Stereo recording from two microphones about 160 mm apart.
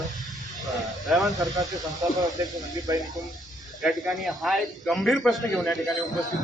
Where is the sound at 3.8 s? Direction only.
5° right (ahead or behind).